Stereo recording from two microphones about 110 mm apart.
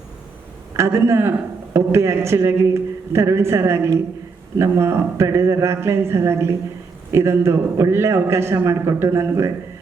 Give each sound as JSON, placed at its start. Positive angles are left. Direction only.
{"t": 0.8, "sound": "a man's voice", "side_deg": -25}